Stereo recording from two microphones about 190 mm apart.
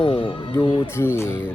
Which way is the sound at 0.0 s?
30° left (ahead or behind).